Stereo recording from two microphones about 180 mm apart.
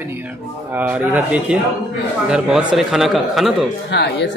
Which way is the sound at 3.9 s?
70° left (ahead or behind).